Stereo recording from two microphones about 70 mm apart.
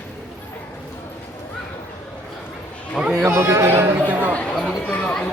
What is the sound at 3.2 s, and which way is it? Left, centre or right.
Speech, right.